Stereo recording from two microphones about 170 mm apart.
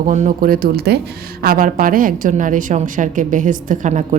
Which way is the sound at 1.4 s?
55° right (ahead or behind).